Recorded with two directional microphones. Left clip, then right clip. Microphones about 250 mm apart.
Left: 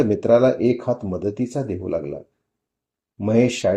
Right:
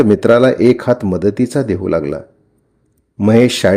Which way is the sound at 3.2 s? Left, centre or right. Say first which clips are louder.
Right 8 dB; right.